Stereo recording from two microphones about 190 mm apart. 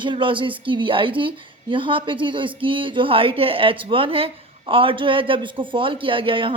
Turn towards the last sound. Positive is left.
turn(degrees=-25)  # may be behind; listen again after turning